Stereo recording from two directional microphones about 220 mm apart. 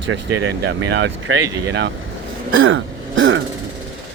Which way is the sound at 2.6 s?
60° right (ahead or behind).